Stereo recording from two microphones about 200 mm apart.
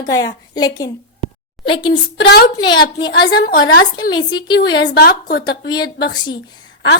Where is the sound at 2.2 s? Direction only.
55° left (ahead or behind).